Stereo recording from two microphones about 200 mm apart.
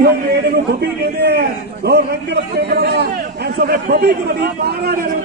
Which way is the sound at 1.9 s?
55° right (ahead or behind).